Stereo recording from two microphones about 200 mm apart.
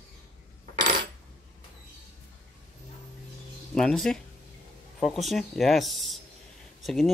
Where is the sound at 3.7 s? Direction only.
Centre (ahead or behind).